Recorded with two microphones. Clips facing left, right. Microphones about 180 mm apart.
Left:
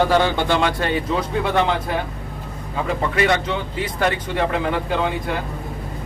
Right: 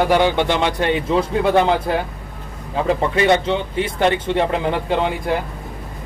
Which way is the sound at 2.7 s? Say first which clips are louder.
Right 4 dB; 25° right (ahead or behind).